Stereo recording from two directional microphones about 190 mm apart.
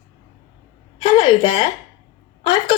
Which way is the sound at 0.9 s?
25° left (ahead or behind).